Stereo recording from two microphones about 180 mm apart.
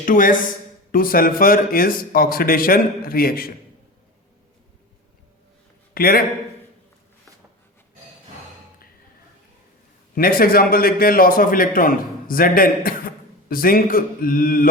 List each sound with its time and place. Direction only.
0.0 s a man's voice: 50° left (ahead or behind)
5.9 s a man's voice: 55° left (ahead or behind)
10.2 s a man's voice: 55° left (ahead or behind)